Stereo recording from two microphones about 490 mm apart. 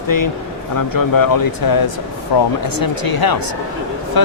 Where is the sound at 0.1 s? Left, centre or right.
Left.